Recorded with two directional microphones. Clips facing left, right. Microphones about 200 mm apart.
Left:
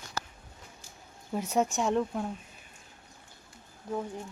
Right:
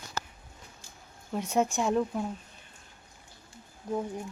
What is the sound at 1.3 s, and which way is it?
Speech, 5° left (ahead or behind).